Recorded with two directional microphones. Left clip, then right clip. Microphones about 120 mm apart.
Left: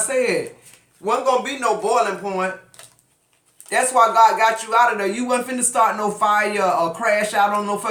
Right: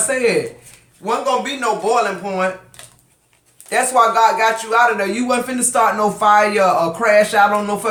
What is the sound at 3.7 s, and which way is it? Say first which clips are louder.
A man's voice: right 2 dB; 20° right (ahead or behind).